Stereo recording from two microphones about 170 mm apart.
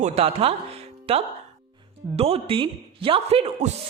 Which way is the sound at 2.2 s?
35° right (ahead or behind).